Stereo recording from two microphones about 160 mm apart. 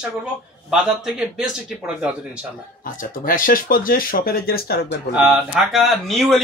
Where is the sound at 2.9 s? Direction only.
60° left (ahead or behind).